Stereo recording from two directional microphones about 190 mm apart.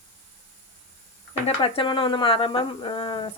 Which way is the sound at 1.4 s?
30° left (ahead or behind).